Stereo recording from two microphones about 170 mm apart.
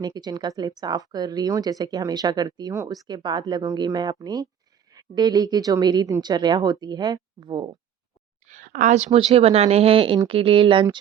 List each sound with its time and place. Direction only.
0.0 s speech: 25° right (ahead or behind)
8.4 s a woman's voice: 50° right (ahead or behind); by 10.8 s 30° right (ahead or behind)